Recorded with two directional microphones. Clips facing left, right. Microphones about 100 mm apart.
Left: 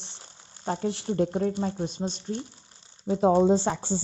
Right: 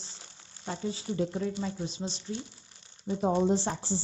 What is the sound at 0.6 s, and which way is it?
Speech, 45° left (ahead or behind).